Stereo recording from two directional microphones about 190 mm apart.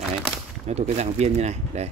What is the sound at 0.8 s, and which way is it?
Speech, 35° right (ahead or behind).